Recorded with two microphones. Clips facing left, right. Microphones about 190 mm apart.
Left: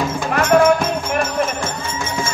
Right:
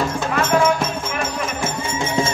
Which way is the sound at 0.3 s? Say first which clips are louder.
Left 5 dB; 60° left (ahead or behind).